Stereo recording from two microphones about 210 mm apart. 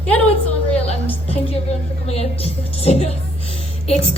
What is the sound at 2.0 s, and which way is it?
A woman's voice, 30° left (ahead or behind).